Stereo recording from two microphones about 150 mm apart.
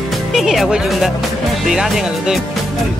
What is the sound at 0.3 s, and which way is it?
Speech, centre (ahead or behind).